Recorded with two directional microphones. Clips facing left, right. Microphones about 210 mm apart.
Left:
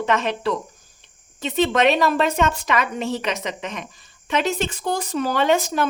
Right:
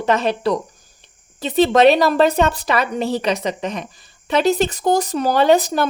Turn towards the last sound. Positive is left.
turn(degrees=-35)  # may be behind; listen again after turning